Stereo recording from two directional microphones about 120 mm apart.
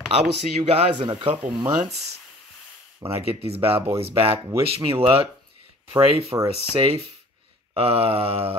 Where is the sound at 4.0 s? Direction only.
55° right (ahead or behind).